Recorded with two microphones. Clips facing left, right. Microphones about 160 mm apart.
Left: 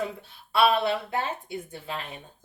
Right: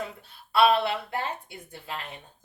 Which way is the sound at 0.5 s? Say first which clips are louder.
Right 1 dB; 20° left (ahead or behind).